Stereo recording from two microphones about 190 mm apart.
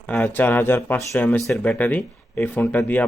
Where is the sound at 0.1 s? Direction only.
10° left (ahead or behind).